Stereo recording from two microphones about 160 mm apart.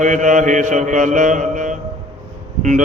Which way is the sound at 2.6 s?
50° right (ahead or behind).